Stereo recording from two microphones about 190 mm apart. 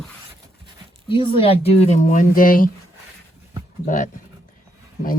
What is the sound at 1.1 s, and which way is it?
Speech, 25° left (ahead or behind).